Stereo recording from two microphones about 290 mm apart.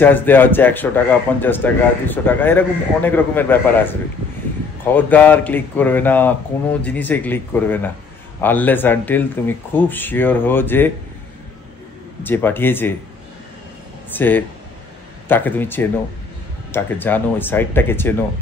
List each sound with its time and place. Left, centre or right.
0.0 s a man's voice: centre
12.2 s a man's voice: centre
14.1 s a man's voice: centre